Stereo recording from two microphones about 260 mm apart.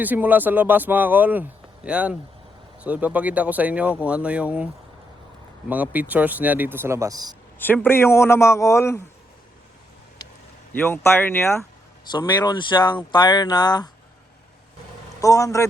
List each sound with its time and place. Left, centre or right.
0.0 s speech: centre
7.6 s speech: centre
10.8 s speech: centre
15.2 s speech: centre